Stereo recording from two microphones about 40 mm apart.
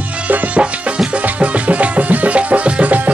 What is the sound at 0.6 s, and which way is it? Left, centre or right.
Music, right.